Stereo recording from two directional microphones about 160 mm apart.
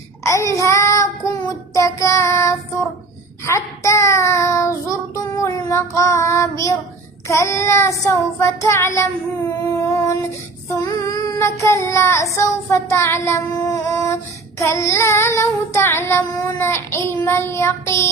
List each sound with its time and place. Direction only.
0.3 s child singing: 20° left (ahead or behind)